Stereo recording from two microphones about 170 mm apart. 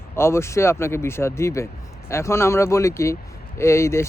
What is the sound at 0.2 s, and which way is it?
Speech, 15° left (ahead or behind).